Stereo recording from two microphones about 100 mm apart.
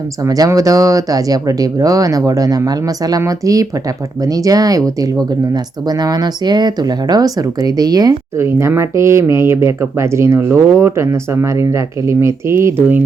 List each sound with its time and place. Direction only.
0.3 s speech: 40° right (ahead or behind)
8.4 s speech: 25° right (ahead or behind)